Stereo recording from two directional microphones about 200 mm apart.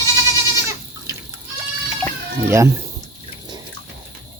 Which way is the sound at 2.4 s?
15° right (ahead or behind).